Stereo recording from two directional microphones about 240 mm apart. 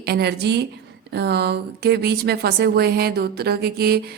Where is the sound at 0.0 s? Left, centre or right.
Right.